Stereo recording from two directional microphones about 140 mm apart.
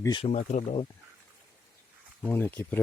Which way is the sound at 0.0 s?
30° left (ahead or behind).